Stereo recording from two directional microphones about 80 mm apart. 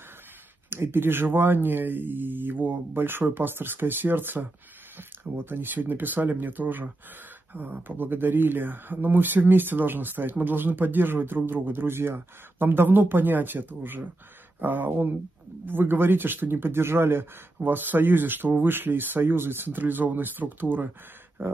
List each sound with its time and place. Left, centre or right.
0.7 s speech: right